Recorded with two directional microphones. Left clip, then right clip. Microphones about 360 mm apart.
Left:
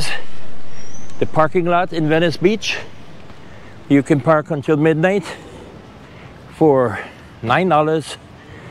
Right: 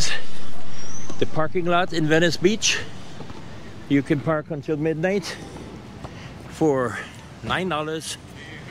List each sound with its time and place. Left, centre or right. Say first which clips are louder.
1.2 s speech: left 8 dB; centre
3.9 s speech: left 8 dB; centre
6.6 s speech: left 8 dB; left
7.4 s a man's voice: left 11 dB; left